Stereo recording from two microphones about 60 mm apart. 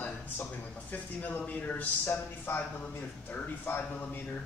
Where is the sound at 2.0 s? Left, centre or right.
Left.